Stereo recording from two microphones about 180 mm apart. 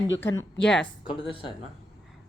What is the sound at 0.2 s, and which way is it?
Speech, 10° left (ahead or behind).